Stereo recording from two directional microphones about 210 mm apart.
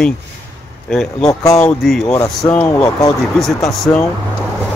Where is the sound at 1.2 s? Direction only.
15° left (ahead or behind).